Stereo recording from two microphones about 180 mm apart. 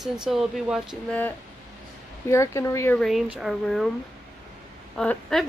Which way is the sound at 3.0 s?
Centre (ahead or behind).